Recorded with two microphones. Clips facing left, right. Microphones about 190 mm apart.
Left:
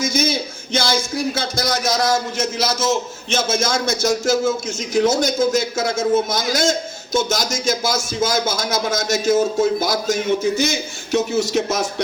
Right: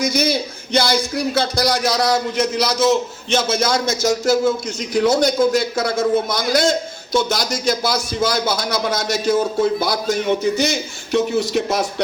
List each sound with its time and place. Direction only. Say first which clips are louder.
0.0 s speech: right 2 dB; 50° left (ahead or behind)